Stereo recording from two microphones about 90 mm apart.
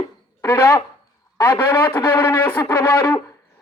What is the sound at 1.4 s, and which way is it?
Music, 25° left (ahead or behind).